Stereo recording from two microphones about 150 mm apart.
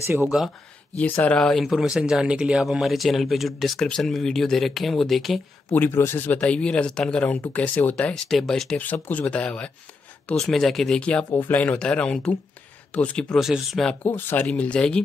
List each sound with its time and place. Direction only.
0.0 s speech: 15° right (ahead or behind)
0.9 s speech: 10° left (ahead or behind)
5.7 s speech: 15° left (ahead or behind)
14.0 s speech: 15° left (ahead or behind)